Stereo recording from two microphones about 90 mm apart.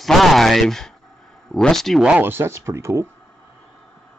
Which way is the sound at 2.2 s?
25° right (ahead or behind).